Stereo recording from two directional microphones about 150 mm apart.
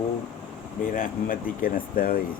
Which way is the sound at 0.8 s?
70° left (ahead or behind).